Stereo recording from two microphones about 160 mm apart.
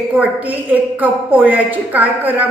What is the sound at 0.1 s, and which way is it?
A woman's voice, 10° right (ahead or behind).